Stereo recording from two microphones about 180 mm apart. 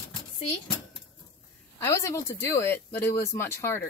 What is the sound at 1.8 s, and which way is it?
A woman's voice, 15° left (ahead or behind).